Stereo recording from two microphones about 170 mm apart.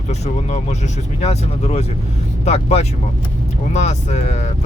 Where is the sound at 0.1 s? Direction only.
40° left (ahead or behind).